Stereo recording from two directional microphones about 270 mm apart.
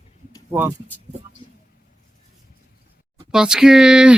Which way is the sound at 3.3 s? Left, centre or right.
Centre.